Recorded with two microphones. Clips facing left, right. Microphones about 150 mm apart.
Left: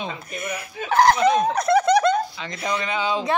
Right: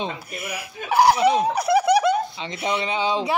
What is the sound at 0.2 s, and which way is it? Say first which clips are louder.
Speech: left 2 dB; 10° right (ahead or behind).